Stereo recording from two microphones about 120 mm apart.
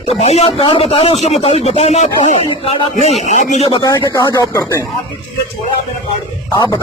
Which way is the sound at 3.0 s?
65° left (ahead or behind).